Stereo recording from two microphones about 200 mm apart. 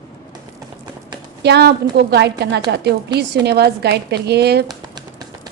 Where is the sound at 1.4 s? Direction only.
55° right (ahead or behind).